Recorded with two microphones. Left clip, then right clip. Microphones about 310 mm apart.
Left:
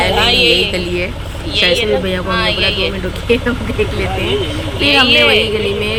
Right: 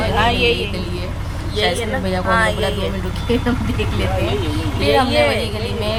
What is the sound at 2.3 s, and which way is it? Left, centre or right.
Speech, right.